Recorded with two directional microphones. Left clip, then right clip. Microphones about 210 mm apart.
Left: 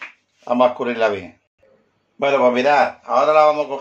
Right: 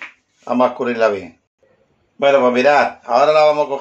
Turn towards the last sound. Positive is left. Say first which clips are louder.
# right 2 dB
turn(degrees=-25)  # may be behind; listen again after turning